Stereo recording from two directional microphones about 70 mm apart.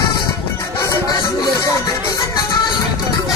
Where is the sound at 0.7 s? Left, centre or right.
Left.